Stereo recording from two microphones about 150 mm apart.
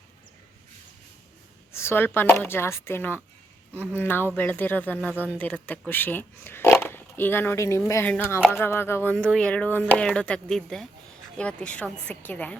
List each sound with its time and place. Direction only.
1.7 s a sound: 15° left (ahead or behind)
2.1 s speech: 15° left (ahead or behind)
9.1 s speech: 5° left (ahead or behind)